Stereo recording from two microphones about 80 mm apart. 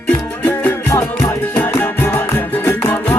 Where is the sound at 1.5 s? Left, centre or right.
Left.